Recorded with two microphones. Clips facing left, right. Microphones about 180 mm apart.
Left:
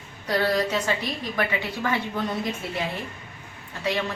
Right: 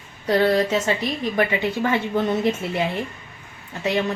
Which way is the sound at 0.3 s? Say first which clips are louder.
Right 5 dB; 30° right (ahead or behind).